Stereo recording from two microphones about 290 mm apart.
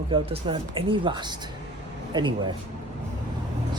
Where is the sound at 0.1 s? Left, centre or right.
Centre.